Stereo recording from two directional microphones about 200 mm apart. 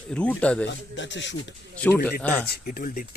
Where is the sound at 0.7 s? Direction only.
65° left (ahead or behind).